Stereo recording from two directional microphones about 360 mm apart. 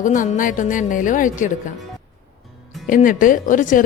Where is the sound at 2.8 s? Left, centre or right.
Left.